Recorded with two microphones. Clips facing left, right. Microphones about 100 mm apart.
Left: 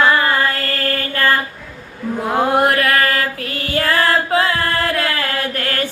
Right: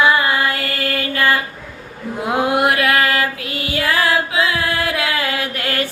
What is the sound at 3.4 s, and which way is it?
Female singing, 45° left (ahead or behind).